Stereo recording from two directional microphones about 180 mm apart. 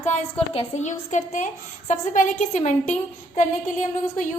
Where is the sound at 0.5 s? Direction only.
40° left (ahead or behind).